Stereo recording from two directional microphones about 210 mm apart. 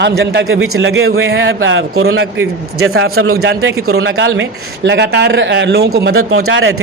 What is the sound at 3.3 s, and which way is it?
Speech, 50° right (ahead or behind).